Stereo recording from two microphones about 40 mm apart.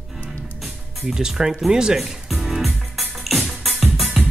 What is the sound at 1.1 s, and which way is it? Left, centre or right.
Speech, centre.